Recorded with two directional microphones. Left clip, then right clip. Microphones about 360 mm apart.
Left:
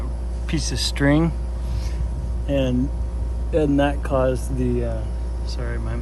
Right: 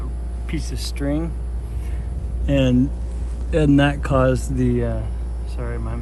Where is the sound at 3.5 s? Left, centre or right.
Right.